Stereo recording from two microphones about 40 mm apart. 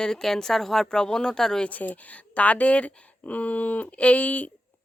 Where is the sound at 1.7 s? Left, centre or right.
Left.